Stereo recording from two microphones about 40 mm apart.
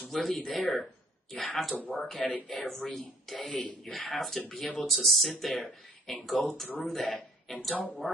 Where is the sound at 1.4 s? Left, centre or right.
Centre.